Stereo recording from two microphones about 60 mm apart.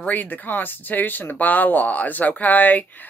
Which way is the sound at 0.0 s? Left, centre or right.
Left.